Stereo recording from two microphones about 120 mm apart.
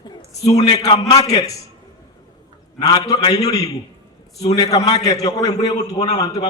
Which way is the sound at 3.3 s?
60° left (ahead or behind).